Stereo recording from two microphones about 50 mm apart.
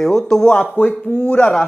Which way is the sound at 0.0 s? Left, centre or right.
Centre.